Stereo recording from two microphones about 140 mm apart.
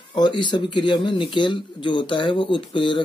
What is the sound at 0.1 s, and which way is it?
Speech, 35° left (ahead or behind).